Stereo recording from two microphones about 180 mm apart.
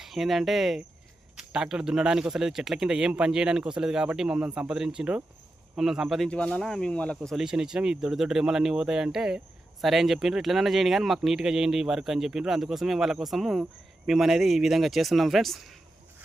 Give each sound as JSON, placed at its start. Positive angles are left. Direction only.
{"t": 0.0, "sound": "speech", "side_deg": 0}